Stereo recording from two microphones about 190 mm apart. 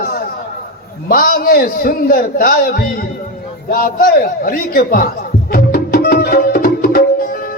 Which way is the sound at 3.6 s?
50° left (ahead or behind).